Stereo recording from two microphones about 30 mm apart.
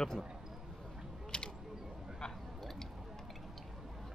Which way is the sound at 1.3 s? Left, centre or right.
Left.